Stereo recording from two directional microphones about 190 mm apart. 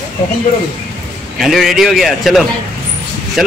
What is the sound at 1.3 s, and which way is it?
A man's voice, centre (ahead or behind).